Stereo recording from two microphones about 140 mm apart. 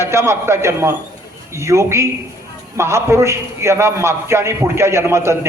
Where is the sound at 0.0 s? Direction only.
20° right (ahead or behind).